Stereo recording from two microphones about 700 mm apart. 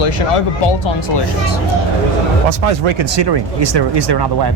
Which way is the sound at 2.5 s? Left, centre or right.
Right.